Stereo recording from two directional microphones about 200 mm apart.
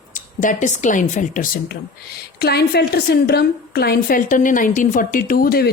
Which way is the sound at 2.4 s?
55° left (ahead or behind).